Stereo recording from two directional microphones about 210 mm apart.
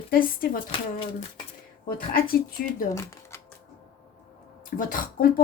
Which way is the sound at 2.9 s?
15° left (ahead or behind).